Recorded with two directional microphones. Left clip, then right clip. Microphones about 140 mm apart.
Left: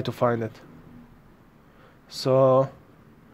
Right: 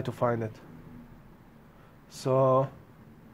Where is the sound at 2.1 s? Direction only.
25° left (ahead or behind).